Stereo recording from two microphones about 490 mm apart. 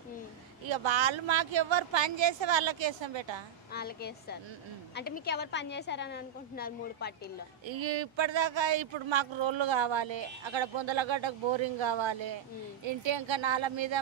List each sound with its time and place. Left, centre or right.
0.7 s speech: right
3.7 s a woman's voice: centre
7.6 s speech: right